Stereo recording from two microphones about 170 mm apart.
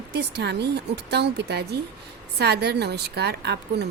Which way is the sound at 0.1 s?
75° right (ahead or behind).